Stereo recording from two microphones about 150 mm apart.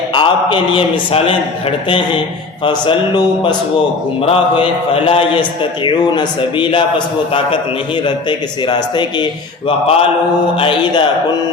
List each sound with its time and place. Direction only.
0.1 s a man's voice: 35° left (ahead or behind)
2.6 s a man's voice: 30° left (ahead or behind)
8.0 s a man's voice: 30° left (ahead or behind)